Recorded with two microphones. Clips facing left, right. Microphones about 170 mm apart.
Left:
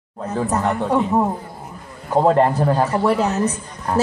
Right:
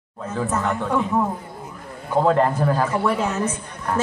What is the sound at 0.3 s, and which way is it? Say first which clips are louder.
Speech: left 3 dB; 35° left (ahead or behind).